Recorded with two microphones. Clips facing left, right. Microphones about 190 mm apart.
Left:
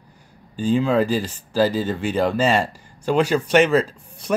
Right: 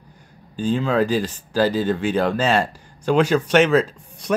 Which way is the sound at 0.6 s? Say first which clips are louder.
Left 1 dB; 5° left (ahead or behind).